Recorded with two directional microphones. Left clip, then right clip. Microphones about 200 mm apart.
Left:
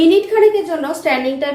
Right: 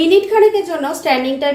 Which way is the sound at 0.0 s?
10° right (ahead or behind).